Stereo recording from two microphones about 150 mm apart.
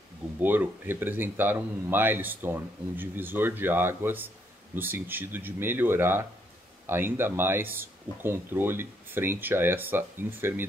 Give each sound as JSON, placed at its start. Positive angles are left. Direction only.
{"t": 0.4, "sound": "speech", "side_deg": -15}